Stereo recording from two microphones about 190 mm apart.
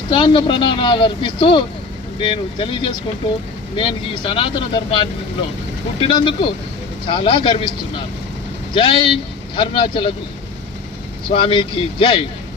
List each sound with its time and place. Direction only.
0.1 s speech: 25° left (ahead or behind)
11.3 s speech: 25° left (ahead or behind)